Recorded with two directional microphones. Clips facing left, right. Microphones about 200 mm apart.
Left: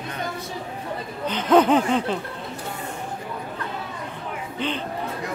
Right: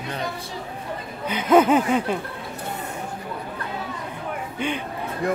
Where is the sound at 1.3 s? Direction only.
10° right (ahead or behind).